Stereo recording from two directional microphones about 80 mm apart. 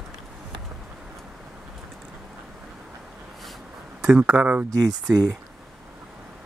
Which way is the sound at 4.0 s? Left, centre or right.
Centre.